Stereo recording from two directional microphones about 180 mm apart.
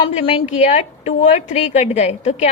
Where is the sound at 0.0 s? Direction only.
35° left (ahead or behind).